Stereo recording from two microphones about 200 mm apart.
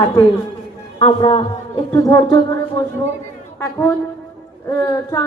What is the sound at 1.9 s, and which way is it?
Music, 15° left (ahead or behind).